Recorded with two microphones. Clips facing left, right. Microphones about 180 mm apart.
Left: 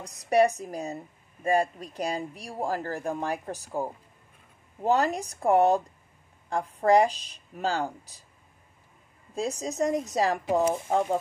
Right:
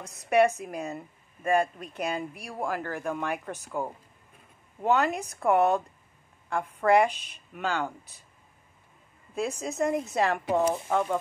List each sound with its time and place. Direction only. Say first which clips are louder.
0.0 s a woman's voice: even; 35° left (ahead or behind)
9.3 s a woman's voice: even; 35° left (ahead or behind)